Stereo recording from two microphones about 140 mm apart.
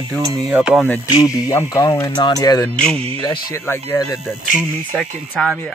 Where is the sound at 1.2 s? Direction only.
25° left (ahead or behind).